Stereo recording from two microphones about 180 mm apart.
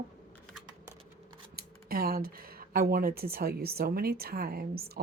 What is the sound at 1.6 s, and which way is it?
Speech, 55° right (ahead or behind).